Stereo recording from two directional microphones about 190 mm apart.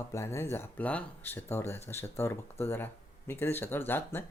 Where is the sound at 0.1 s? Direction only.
15° left (ahead or behind).